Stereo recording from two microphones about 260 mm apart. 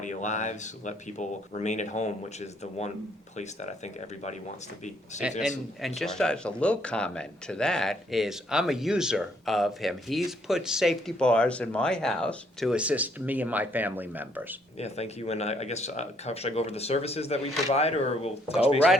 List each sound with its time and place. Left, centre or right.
0.0 s speech: left
3.3 s speech: left
6.0 s speech: centre
14.8 s speech: left